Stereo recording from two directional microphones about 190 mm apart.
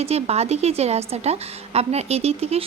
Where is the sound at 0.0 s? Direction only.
35° right (ahead or behind).